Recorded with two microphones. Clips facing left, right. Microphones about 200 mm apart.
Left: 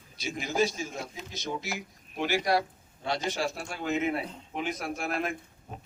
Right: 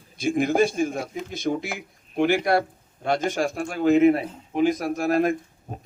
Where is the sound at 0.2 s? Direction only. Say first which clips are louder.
Right 8 dB; 55° right (ahead or behind).